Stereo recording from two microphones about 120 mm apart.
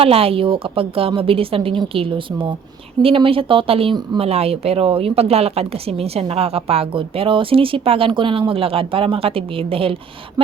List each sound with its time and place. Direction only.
0.0 s a woman's voice: 55° right (ahead or behind)